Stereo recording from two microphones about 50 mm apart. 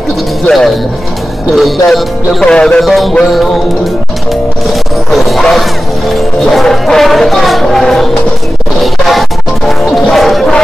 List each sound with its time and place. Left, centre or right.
1.5 s music: centre
2.4 s music: centre
2.8 s music: centre
4.6 s music: centre
10.1 s a sound: centre